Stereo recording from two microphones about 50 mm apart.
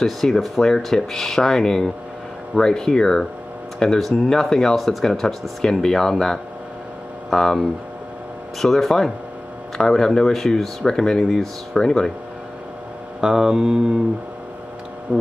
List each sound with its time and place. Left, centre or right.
0.0 s speech: centre
13.2 s speech: centre
15.1 s speech: right